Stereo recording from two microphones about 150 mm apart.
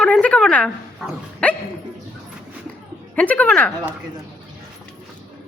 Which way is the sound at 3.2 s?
10° left (ahead or behind).